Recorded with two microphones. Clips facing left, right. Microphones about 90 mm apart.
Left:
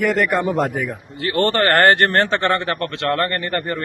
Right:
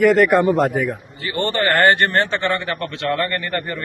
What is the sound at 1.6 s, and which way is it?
A man's voice, 45° left (ahead or behind).